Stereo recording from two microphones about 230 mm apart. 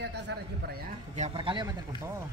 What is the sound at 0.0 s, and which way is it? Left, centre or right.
Speech, right.